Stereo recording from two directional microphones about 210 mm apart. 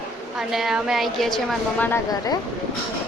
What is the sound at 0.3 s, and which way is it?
A woman's voice, centre (ahead or behind).